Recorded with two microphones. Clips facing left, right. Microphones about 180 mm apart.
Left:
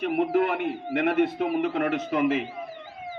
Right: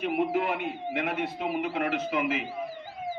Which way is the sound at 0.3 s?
55° left (ahead or behind).